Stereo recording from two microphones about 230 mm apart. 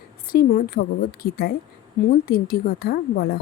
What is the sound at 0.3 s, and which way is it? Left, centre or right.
A woman's voice, left.